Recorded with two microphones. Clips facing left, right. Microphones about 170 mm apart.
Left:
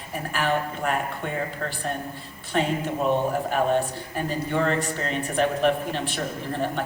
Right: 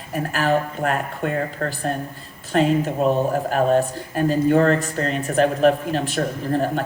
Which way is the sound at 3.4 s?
40° right (ahead or behind).